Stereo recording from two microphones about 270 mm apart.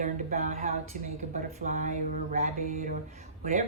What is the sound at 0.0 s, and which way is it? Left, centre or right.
Speech, right.